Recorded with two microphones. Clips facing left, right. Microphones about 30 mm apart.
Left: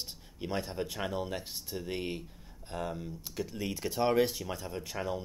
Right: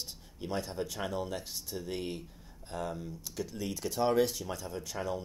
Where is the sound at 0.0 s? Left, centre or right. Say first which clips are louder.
Left 1 dB; centre.